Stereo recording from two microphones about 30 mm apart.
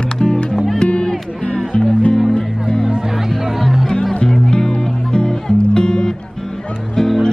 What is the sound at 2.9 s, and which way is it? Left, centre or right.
Music, right.